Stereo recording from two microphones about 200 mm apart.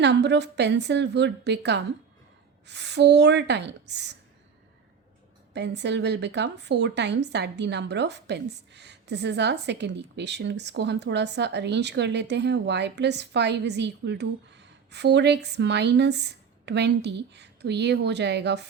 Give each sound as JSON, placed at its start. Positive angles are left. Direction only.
{"t": 0.0, "sound": "speech", "side_deg": -60}
{"t": 5.5, "sound": "speech", "side_deg": -60}